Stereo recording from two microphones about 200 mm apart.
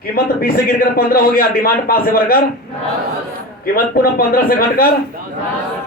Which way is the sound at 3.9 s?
50° left (ahead or behind).